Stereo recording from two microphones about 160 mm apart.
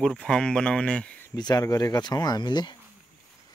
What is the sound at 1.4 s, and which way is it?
Speech, 25° left (ahead or behind).